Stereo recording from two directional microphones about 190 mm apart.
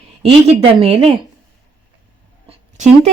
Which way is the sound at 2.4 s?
35° right (ahead or behind).